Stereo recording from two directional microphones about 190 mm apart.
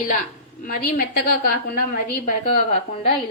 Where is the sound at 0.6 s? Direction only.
50° left (ahead or behind).